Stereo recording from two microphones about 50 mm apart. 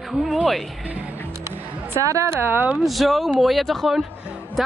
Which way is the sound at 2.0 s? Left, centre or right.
Right.